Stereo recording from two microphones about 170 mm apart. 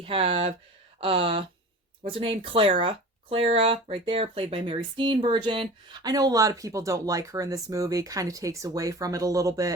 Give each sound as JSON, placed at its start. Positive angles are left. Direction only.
{"t": 0.0, "sound": "speech", "side_deg": -30}